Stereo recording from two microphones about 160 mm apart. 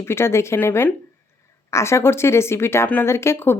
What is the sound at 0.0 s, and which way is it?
Speech, 15° left (ahead or behind).